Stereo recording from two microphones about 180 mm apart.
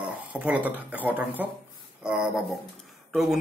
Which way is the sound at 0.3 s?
5° right (ahead or behind).